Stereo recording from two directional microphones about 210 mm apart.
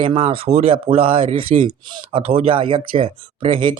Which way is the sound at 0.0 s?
25° right (ahead or behind).